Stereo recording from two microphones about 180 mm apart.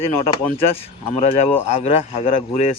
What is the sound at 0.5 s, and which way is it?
Speech, 35° left (ahead or behind).